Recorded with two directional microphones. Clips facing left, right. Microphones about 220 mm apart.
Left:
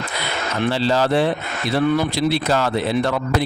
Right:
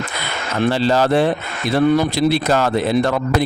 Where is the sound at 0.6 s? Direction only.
50° right (ahead or behind).